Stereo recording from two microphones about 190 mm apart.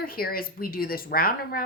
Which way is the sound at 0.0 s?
50° left (ahead or behind).